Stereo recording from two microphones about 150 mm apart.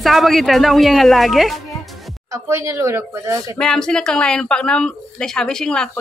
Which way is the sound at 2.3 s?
20° right (ahead or behind).